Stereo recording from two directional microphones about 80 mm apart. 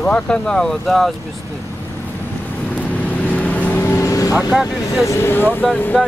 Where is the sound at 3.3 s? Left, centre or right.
Centre.